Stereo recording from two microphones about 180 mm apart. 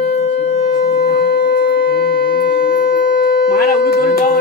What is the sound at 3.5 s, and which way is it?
Speech, 60° left (ahead or behind).